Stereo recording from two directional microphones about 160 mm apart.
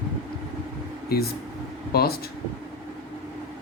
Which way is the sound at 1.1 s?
70° left (ahead or behind).